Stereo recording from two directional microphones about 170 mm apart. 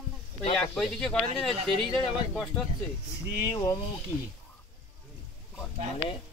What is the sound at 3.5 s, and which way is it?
Speech, 20° left (ahead or behind).